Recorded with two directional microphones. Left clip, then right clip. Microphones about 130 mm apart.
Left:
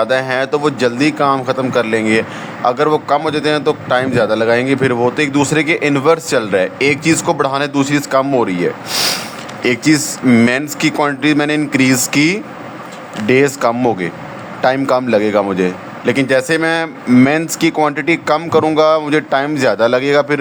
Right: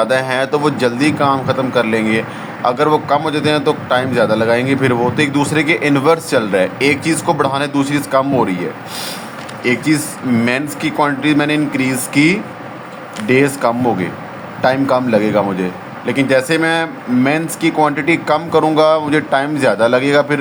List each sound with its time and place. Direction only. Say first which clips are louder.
0.0 s a man's voice: even; 25° left (ahead or behind)